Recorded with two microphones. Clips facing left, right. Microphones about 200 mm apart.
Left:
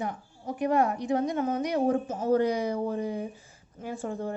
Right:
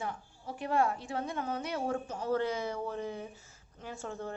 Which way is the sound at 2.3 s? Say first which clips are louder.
Left 7 dB; 15° left (ahead or behind).